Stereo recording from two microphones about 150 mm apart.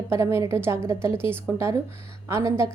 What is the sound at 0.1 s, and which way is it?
A woman's voice, 20° right (ahead or behind).